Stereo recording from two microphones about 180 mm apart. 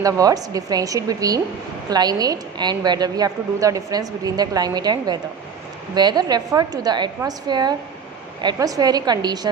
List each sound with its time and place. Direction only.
0.0 s a woman's voice: 20° right (ahead or behind)